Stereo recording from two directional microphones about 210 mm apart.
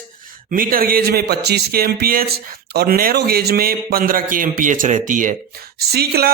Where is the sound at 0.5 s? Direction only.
40° right (ahead or behind).